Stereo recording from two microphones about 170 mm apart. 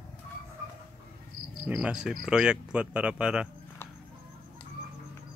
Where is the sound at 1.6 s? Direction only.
5° right (ahead or behind).